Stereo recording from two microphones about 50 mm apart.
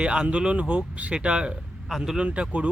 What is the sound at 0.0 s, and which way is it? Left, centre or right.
Speech, right.